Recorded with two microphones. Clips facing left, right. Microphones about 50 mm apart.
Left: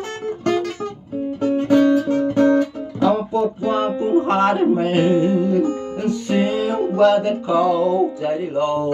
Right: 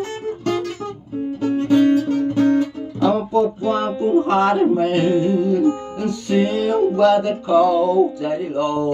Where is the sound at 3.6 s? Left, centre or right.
Centre.